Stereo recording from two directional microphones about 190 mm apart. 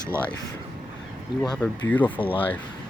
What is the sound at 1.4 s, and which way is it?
Speech, 10° left (ahead or behind).